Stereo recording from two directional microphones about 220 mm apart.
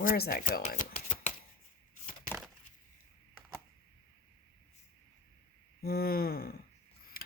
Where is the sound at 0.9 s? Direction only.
30° left (ahead or behind).